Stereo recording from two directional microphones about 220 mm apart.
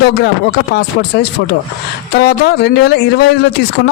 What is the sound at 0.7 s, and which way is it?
Speech, 50° left (ahead or behind).